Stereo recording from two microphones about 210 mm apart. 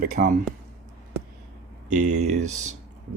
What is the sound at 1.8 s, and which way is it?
Speech, 35° right (ahead or behind).